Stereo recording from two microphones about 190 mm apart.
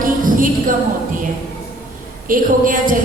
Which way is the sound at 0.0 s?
45° right (ahead or behind).